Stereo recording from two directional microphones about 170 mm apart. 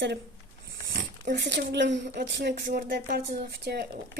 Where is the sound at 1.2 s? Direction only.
85° right; by 4.2 s 65° right (ahead or behind).